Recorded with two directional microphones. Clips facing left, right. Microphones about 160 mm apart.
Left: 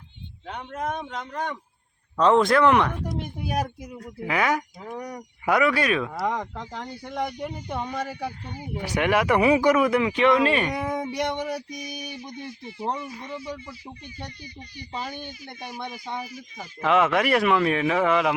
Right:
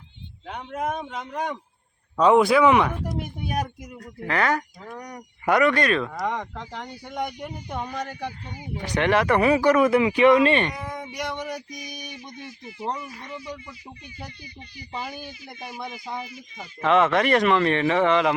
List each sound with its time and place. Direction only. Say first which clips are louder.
0.4 s a man's voice: right 2 dB; 5° right (ahead or behind); by 9.8 s 15° left (ahead or behind)
9.8 s a man's voice: right 3 dB; 5° right (ahead or behind)
10.4 s speech: right 2 dB; 5° left (ahead or behind)
10.8 s speech: left 6 dB; 55° left (ahead or behind)
11.1 s speech: left 4 dB; 25° left (ahead or behind)
11.4 s speech: left 3 dB; centre (ahead or behind)
13.0 s speech: left 2 dB; 25° left (ahead or behind)
13.7 s speech: left 2 dB; centre (ahead or behind)
16.2 s speech: left 1 dB; 40° left (ahead or behind)
16.8 s speech: right 1 dB; 10° left (ahead or behind)